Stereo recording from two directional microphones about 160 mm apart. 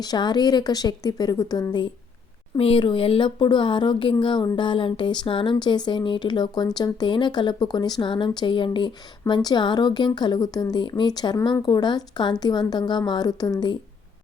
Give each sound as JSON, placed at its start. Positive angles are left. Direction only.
{"t": 0.0, "sound": "speech", "side_deg": 25}